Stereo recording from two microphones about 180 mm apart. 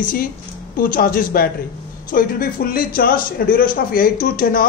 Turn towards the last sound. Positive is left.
turn(degrees=50)  # may be behind; listen again after turning